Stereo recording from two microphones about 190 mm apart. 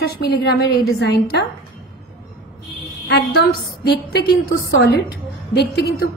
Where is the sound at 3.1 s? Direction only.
55° left (ahead or behind).